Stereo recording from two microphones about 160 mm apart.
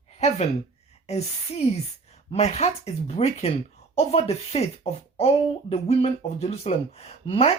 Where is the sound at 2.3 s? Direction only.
40° left (ahead or behind).